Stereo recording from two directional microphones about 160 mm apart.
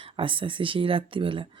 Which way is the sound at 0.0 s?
35° right (ahead or behind).